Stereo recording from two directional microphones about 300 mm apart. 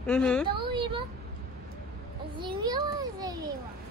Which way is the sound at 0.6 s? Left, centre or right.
Centre.